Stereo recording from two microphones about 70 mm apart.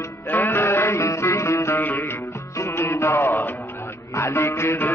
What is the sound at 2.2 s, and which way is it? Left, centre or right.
Music, left.